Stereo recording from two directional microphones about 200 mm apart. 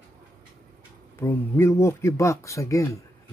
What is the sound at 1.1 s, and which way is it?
Speech, 10° left (ahead or behind).